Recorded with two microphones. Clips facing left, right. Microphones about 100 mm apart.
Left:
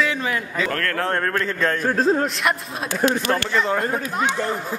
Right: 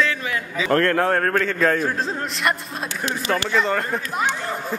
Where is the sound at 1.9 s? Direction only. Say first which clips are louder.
Left 8 dB; 45° left (ahead or behind).